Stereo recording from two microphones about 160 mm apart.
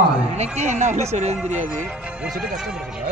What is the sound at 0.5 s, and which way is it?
Speech, 50° right (ahead or behind).